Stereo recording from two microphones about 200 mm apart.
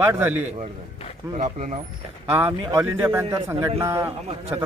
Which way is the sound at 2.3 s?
10° right (ahead or behind).